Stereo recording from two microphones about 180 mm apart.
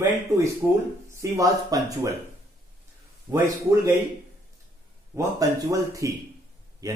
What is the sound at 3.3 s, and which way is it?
Speech, 20° right (ahead or behind).